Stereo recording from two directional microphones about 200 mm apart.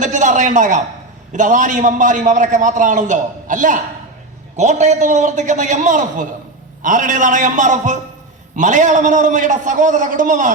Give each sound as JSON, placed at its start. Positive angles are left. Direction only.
{"t": 0.0, "sound": "a man's voice", "side_deg": -40}